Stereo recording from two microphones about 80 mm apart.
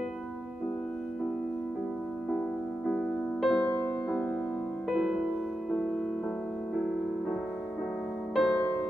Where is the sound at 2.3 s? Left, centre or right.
Centre.